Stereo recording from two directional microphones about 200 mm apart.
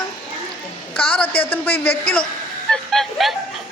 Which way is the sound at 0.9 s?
10° left (ahead or behind).